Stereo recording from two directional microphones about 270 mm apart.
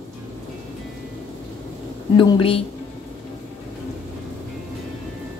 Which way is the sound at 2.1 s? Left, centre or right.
Centre.